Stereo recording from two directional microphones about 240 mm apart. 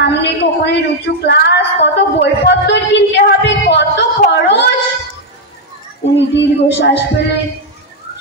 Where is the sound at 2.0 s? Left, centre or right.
Left.